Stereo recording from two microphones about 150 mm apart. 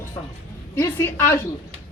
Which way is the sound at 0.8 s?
15° left (ahead or behind).